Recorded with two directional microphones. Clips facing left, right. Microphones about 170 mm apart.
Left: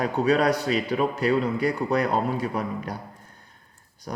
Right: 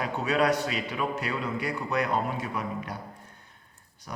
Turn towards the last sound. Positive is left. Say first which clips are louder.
# left 6 dB
turn(degrees=40)  # may be behind; listen again after turning